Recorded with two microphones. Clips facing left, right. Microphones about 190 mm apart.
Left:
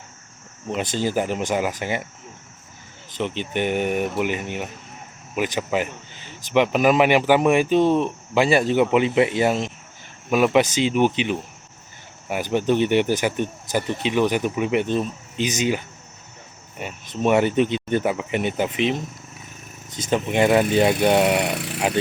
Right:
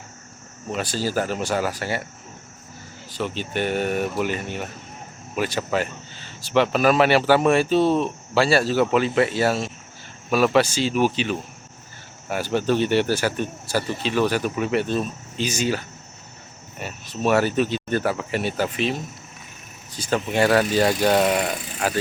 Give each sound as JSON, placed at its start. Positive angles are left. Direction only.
{"t": 0.7, "sound": "speech", "side_deg": 20}
{"t": 3.1, "sound": "speech", "side_deg": 20}
{"t": 20.0, "sound": "speech", "side_deg": 20}
{"t": 21.3, "sound": "speech", "side_deg": 70}